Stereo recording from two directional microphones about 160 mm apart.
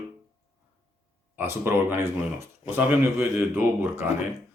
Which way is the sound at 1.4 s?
15° right (ahead or behind).